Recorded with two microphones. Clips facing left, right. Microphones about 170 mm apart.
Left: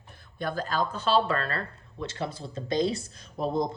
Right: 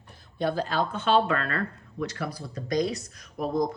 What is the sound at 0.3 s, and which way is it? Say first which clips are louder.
Speech: right 3 dB; 45° left (ahead or behind).